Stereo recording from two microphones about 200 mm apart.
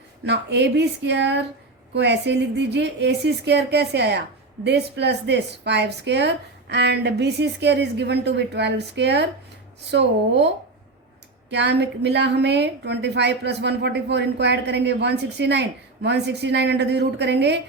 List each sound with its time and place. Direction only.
0.3 s a woman's voice: 60° right (ahead or behind)